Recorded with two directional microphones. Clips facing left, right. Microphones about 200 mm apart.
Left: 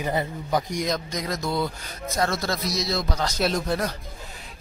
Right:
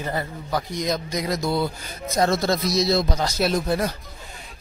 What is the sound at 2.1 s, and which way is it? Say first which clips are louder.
Speech: right 5 dB; 20° right (ahead or behind).